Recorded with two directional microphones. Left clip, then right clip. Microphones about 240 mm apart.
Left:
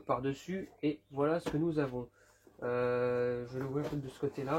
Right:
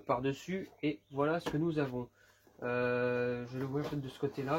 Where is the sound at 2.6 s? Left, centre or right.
Right.